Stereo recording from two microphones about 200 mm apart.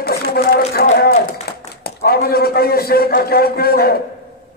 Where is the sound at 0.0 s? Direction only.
50° left (ahead or behind).